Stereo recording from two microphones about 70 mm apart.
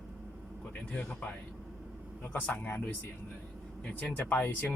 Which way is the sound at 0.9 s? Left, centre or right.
Left.